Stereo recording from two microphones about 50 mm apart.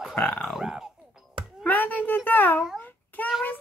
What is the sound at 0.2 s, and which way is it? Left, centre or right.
Speech, left.